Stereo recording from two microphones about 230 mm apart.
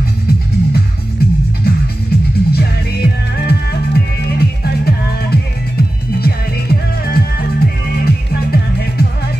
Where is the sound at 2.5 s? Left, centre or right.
Left.